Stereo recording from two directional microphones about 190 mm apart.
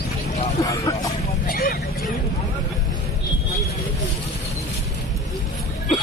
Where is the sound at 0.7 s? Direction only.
15° left (ahead or behind).